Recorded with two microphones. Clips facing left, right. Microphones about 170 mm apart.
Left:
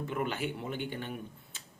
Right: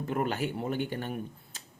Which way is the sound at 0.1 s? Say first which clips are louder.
Right 5 dB; 40° right (ahead or behind).